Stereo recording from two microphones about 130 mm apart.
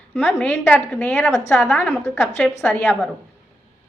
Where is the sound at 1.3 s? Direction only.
20° left (ahead or behind).